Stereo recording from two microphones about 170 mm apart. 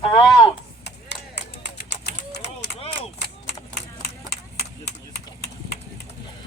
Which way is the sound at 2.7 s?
35° left (ahead or behind).